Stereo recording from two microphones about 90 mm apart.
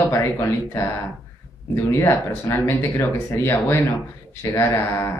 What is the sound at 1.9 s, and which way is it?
Speech, 25° left (ahead or behind).